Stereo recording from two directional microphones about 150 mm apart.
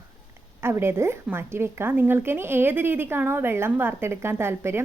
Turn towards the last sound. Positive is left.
turn(degrees=-15)  # may be behind; listen again after turning